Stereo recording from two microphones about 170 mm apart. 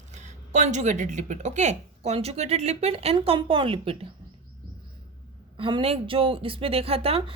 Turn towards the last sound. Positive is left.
turn(degrees=-35)  # may be behind; listen again after turning